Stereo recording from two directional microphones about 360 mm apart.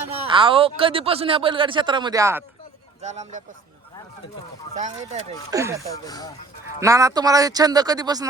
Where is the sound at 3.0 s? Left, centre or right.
Centre.